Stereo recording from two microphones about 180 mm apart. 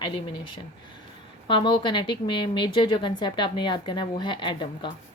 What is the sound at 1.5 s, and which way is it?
A woman's voice, 25° left (ahead or behind).